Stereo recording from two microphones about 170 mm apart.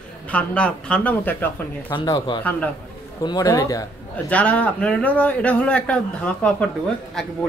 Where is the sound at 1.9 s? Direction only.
25° left (ahead or behind).